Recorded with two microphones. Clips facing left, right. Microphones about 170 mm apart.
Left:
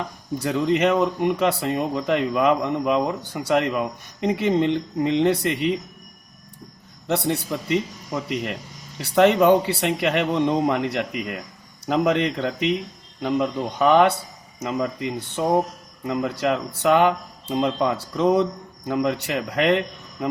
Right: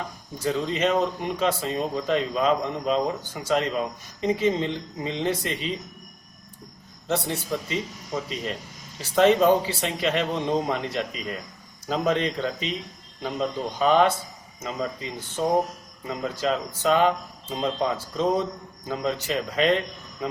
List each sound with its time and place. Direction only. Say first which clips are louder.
0.3 s speech: left 5 dB; 70° left (ahead or behind)
7.1 s speech: left 3 dB; 65° left (ahead or behind)